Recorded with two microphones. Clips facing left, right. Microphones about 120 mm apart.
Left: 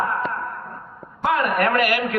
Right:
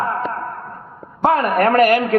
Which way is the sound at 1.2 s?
30° right (ahead or behind).